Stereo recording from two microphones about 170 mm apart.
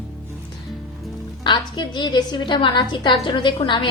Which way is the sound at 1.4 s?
25° left (ahead or behind).